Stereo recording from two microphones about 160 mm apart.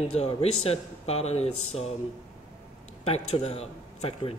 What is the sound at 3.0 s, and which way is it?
Speech, 40° left (ahead or behind).